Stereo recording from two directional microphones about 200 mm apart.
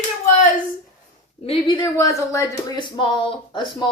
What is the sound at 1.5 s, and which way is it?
A woman's voice, 25° left (ahead or behind).